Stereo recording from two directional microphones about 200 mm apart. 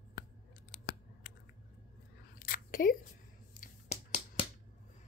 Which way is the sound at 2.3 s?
45° left (ahead or behind).